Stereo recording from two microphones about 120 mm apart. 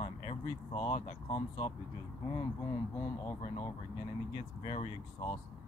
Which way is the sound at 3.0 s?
45° left (ahead or behind).